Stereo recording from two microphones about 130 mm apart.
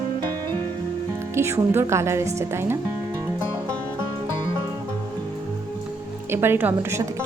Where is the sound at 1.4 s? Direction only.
20° right (ahead or behind).